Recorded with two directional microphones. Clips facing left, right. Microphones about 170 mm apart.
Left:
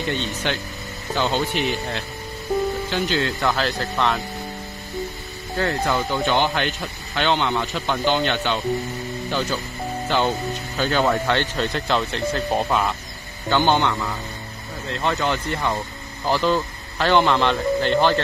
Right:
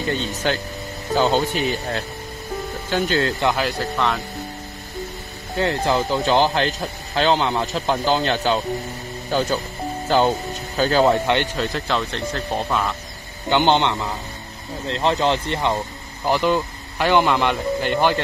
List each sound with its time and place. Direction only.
0.1 s speech: 40° right (ahead or behind)
3.3 s speech: 15° right (ahead or behind)
4.0 s speech: 5° right (ahead or behind)
5.6 s speech: 30° right (ahead or behind)
11.5 s speech: centre (ahead or behind)
12.5 s speech: 10° left (ahead or behind)
13.5 s speech: 20° right (ahead or behind)
16.3 s speech: 15° right (ahead or behind)